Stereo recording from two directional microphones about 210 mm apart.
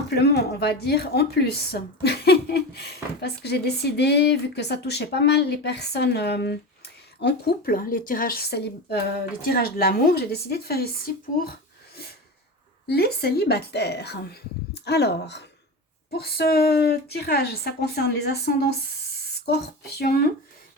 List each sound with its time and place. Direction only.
0.1 s a woman's voice: 50° left (ahead or behind)
12.9 s a woman's voice: 50° left (ahead or behind)